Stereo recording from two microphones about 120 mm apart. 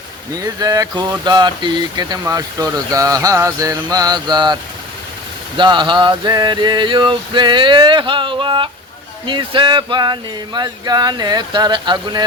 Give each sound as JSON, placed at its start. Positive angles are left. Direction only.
{"t": 0.3, "sound": "speech", "side_deg": -30}
{"t": 5.5, "sound": "speech", "side_deg": -40}